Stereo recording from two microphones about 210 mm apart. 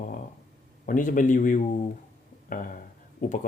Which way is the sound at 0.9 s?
40° left (ahead or behind).